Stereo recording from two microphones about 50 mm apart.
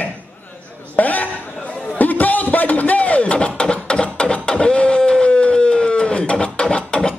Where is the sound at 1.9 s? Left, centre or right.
Left.